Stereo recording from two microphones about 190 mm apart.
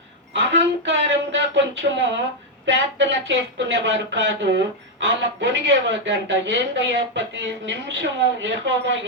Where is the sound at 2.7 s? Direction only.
75° right (ahead or behind).